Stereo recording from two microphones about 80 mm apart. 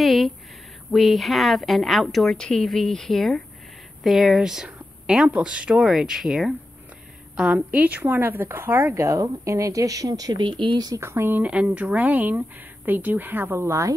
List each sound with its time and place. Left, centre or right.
0.0 s a woman's voice: centre
7.3 s speech: centre; by 10.9 s right
11.0 s speech: right
11.4 s speech: centre; by 13.9 s right